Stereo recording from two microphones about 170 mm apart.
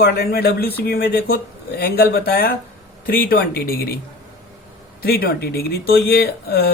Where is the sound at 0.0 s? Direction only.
70° left (ahead or behind).